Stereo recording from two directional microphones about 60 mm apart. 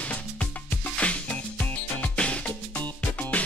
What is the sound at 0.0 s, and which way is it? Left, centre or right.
Music, left.